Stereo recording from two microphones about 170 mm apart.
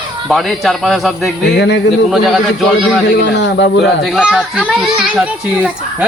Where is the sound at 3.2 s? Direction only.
90° left.